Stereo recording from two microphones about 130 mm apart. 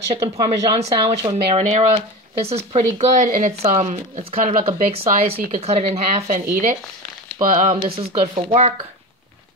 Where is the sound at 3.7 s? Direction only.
65° right (ahead or behind).